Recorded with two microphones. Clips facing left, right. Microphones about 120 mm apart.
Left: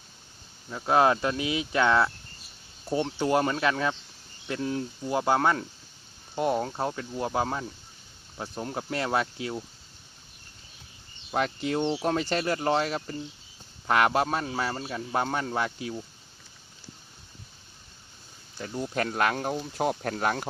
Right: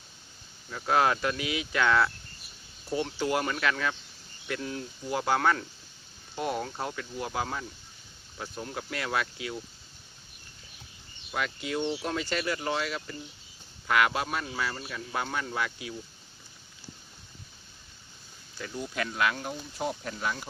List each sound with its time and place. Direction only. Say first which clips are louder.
0.7 s a man's voice: left 3 dB; 25° left (ahead or behind)
11.3 s a man's voice: left 5 dB; 35° left (ahead or behind)
18.5 s speech: left 4 dB; 30° left (ahead or behind); by 20.5 s 55° left (ahead or behind)